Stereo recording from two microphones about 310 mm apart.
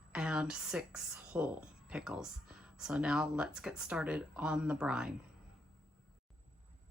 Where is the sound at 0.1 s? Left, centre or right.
Centre.